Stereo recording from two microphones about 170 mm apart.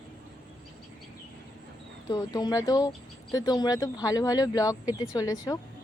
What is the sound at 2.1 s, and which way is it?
Speech, 25° left (ahead or behind).